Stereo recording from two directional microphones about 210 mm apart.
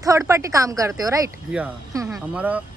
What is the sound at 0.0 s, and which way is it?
Speech, 15° right (ahead or behind).